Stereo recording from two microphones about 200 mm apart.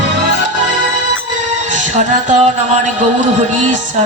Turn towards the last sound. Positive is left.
turn(degrees=-35)  # may be behind; listen again after turning